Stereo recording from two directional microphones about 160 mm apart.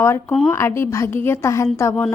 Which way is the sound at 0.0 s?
15° left (ahead or behind).